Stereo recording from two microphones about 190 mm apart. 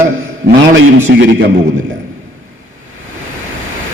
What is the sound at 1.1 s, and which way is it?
Speech, 65° right (ahead or behind).